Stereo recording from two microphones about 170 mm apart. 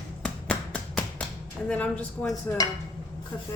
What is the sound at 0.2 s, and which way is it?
Finger snapping, 10° left (ahead or behind).